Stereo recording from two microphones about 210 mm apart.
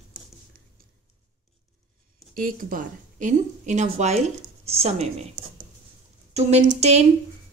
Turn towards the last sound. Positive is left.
turn(degrees=-30)  # may be behind; listen again after turning